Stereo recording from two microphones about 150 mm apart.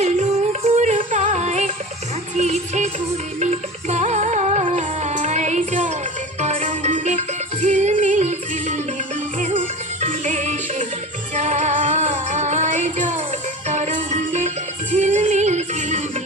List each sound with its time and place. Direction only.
0.0 s music: 45° right (ahead or behind)